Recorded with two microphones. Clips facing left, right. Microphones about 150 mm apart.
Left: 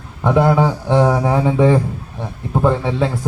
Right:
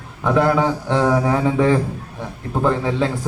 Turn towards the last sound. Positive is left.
turn(degrees=5)  # may be behind; listen again after turning